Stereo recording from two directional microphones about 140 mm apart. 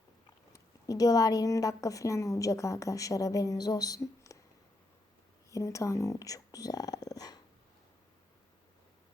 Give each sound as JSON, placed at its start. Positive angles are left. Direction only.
{"t": 0.5, "sound": "a woman's voice", "side_deg": 25}
{"t": 5.5, "sound": "speech", "side_deg": 20}